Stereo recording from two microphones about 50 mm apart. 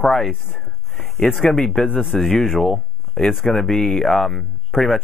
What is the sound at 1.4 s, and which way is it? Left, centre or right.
Speech, centre.